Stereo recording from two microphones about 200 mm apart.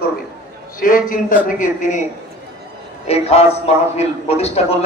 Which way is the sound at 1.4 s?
40° left (ahead or behind).